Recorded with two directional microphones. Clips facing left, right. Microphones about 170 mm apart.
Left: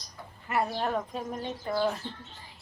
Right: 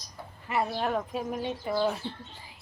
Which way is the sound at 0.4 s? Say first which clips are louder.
Even; centre (ahead or behind).